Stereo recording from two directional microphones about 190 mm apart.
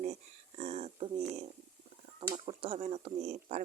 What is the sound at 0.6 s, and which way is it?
Speech, 35° right (ahead or behind).